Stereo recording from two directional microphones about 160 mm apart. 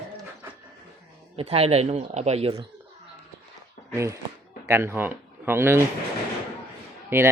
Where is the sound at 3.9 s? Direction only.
20° right (ahead or behind).